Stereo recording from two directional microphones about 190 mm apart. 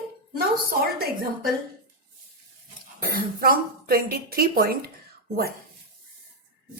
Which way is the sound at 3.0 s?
50° right (ahead or behind).